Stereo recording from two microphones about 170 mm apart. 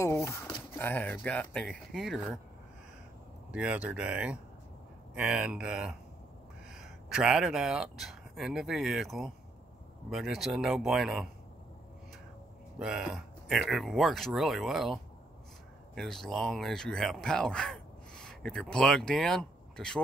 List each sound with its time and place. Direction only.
0.0 s speech: 15° left (ahead or behind); by 2.3 s centre (ahead or behind)
3.5 s speech: 10° right (ahead or behind)
12.7 s speech: 5° right (ahead or behind)